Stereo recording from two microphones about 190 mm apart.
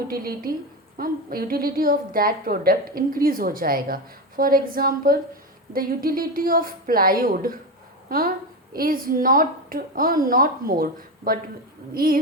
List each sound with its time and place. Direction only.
0.1 s a woman's voice: 50° right (ahead or behind)
8.7 s a woman's voice: 50° right (ahead or behind)
11.9 s a woman's voice: 50° right (ahead or behind)